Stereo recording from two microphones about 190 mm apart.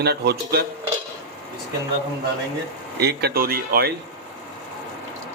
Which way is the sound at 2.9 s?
60° right (ahead or behind).